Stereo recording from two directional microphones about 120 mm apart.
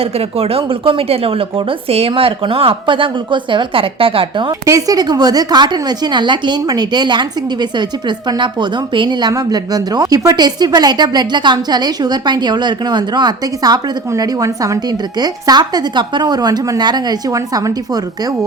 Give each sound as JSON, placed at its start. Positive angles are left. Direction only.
{"t": 0.0, "sound": "speech", "side_deg": -55}
{"t": 4.6, "sound": "a woman's voice", "side_deg": -30}